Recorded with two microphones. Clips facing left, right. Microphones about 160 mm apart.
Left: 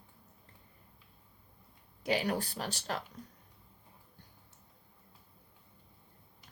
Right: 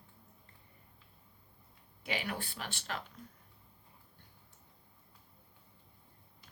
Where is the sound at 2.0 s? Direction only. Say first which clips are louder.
Left 7 dB; 40° left (ahead or behind).